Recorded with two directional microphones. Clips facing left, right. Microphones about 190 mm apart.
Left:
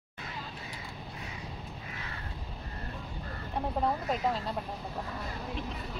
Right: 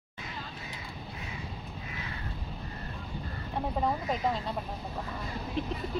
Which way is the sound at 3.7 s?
5° right (ahead or behind).